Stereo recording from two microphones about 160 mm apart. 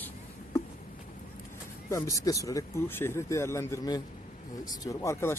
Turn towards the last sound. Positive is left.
turn(degrees=15)  # may be behind; listen again after turning